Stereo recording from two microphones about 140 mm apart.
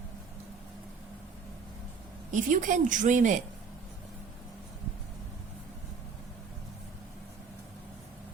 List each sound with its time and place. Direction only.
2.3 s a woman's voice: 65° right (ahead or behind)